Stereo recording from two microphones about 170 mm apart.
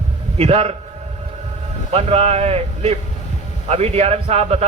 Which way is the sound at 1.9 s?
40° right (ahead or behind).